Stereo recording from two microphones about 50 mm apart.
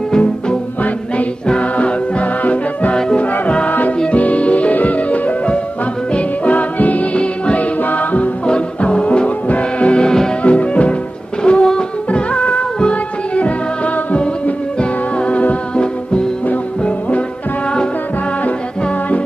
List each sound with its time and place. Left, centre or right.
0.8 s music: left
7.2 s music: left
7.8 s music: left
8.5 s music: centre
10.4 s music: left